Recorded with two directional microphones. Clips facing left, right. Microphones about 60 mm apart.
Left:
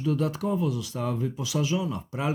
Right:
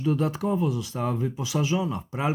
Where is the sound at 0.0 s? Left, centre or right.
Right.